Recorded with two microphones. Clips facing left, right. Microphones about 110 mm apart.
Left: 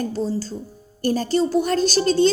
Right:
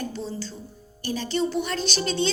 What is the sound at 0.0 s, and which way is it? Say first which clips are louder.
Speech: left 7 dB; 40° left (ahead or behind).